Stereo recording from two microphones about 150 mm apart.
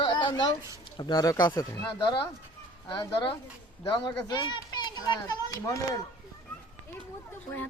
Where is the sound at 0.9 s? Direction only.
30° left (ahead or behind).